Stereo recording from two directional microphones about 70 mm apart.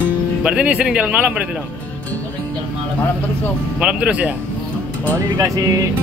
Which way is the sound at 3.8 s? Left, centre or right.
Centre.